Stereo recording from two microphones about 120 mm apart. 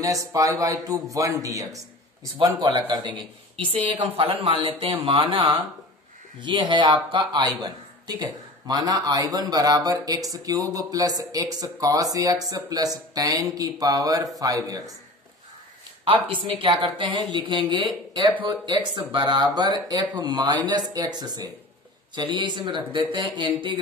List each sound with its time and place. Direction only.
0.0 s a woman's voice: 25° right (ahead or behind)
16.0 s a woman's voice: 45° right (ahead or behind)